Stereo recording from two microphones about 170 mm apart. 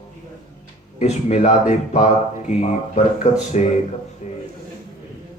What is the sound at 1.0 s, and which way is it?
Speech, 40° left (ahead or behind).